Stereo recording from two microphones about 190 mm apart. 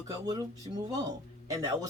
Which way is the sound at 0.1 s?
20° right (ahead or behind).